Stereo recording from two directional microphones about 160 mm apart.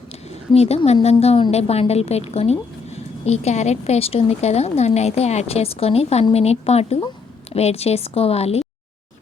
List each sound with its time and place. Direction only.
0.3 s a woman's voice: 40° left (ahead or behind)